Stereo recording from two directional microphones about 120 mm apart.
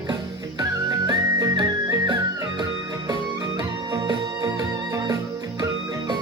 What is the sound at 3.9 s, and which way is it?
Music, 35° right (ahead or behind).